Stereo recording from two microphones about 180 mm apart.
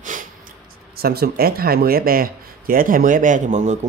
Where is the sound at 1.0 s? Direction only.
60° right (ahead or behind).